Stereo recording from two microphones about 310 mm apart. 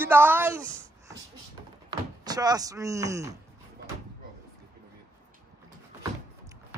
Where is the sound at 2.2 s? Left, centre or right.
Centre.